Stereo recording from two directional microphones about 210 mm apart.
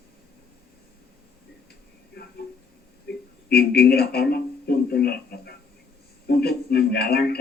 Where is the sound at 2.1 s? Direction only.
50° left (ahead or behind).